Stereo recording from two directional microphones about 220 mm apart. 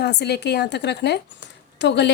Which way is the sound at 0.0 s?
50° left (ahead or behind).